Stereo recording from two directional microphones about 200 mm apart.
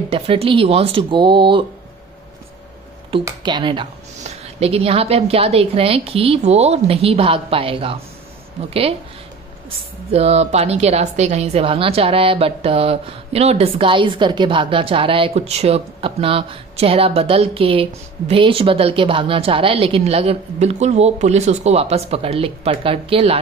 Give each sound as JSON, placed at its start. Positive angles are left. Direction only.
{"t": 0.1, "sound": "a woman's voice", "side_deg": -30}
{"t": 3.3, "sound": "a woman's voice", "side_deg": -20}
{"t": 10.1, "sound": "a woman's voice", "side_deg": -30}